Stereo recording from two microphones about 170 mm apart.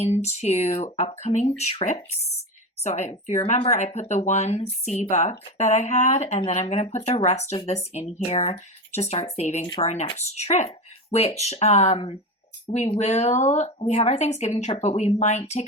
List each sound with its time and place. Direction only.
0.0 s speech: 40° left (ahead or behind)